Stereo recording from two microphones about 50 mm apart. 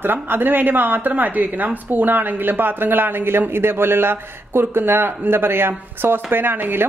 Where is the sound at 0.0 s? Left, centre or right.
Right.